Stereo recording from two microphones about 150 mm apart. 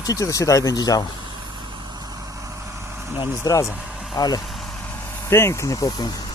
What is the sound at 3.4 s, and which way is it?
Speech, 20° left (ahead or behind).